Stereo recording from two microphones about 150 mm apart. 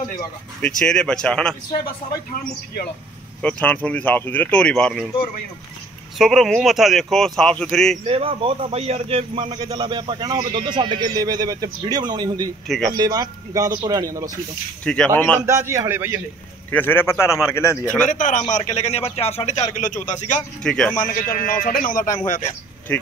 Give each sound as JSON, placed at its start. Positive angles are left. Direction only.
{"t": 0.6, "sound": "speech", "side_deg": 5}
{"t": 3.6, "sound": "speech", "side_deg": 10}
{"t": 6.1, "sound": "speech", "side_deg": 0}
{"t": 8.1, "sound": "a man's voice", "side_deg": -40}
{"t": 12.6, "sound": "speech", "side_deg": 0}
{"t": 12.9, "sound": "speech", "side_deg": -25}
{"t": 15.1, "sound": "speech", "side_deg": 5}
{"t": 15.4, "sound": "a man's voice", "side_deg": -20}
{"t": 16.7, "sound": "speech", "side_deg": 15}
{"t": 18.1, "sound": "a man's voice", "side_deg": 55}
{"t": 20.6, "sound": "speech", "side_deg": 5}
{"t": 20.9, "sound": "a man's voice", "side_deg": 65}
{"t": 22.9, "sound": "speech", "side_deg": 10}